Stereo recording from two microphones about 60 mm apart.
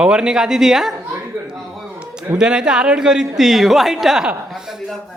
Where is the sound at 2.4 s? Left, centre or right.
Centre.